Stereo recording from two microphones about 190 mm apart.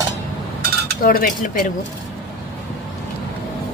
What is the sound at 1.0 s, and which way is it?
Speech, 50° left (ahead or behind).